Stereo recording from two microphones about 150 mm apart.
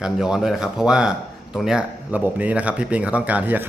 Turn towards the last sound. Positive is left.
turn(degrees=-10)  # may be behind; listen again after turning